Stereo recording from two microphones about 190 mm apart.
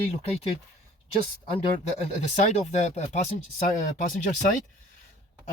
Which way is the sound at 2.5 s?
35° left (ahead or behind).